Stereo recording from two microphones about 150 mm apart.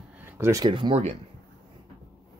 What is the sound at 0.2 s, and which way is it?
Speech, 20° right (ahead or behind).